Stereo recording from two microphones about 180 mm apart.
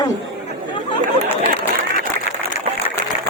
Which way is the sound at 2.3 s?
50° left (ahead or behind).